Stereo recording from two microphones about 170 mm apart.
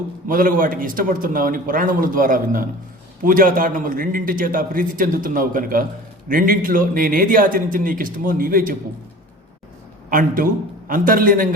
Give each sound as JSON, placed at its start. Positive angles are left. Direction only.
{"t": 0.3, "sound": "a man's voice", "side_deg": -55}
{"t": 10.1, "sound": "a man's voice", "side_deg": -55}